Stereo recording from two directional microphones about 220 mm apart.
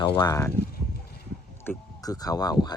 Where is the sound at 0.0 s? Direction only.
20° left (ahead or behind).